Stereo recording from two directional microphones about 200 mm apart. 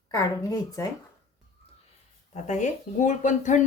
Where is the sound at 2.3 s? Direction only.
35° left (ahead or behind).